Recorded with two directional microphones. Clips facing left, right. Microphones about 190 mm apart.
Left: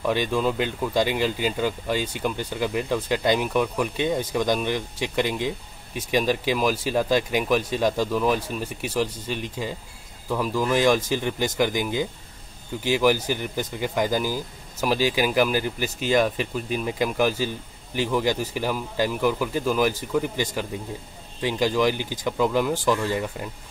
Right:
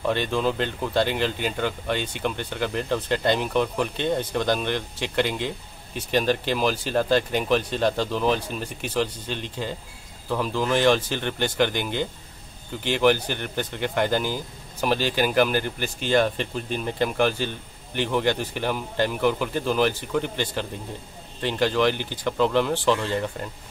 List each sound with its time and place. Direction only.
0.0 s speech: 5° left (ahead or behind)